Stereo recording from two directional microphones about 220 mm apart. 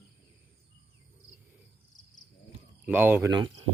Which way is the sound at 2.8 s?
10° right (ahead or behind).